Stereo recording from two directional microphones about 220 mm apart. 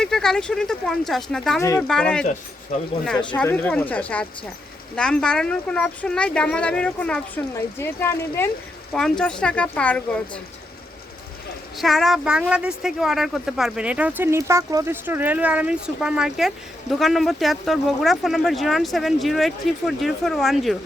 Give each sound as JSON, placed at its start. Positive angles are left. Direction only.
{"t": 0.0, "sound": "speech", "side_deg": 5}
{"t": 2.7, "sound": "speech", "side_deg": 35}
{"t": 3.3, "sound": "speech", "side_deg": 10}
{"t": 11.8, "sound": "speech", "side_deg": 0}